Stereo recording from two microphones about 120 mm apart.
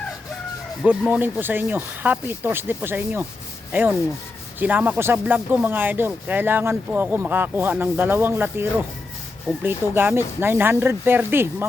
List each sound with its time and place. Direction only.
1.1 s speech: 15° right (ahead or behind)
9.6 s speech: 20° right (ahead or behind)